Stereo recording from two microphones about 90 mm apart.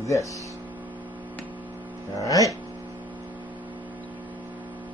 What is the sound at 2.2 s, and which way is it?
Speech, 40° left (ahead or behind).